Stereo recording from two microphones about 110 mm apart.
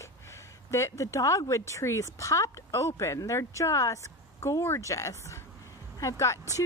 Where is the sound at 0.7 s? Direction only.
25° left (ahead or behind).